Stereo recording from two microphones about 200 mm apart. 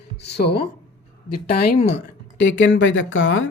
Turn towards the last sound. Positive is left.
turn(degrees=75)  # may be behind; listen again after turning